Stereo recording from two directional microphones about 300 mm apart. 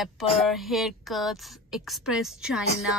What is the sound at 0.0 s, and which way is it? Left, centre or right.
Speech, centre.